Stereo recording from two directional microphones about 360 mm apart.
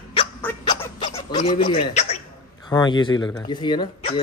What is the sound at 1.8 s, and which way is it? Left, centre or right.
Speech, centre.